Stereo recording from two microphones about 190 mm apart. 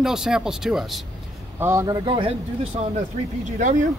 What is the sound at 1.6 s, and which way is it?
Speech, 15° right (ahead or behind).